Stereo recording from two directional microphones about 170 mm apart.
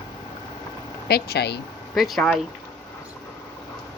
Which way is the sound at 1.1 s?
70° left (ahead or behind).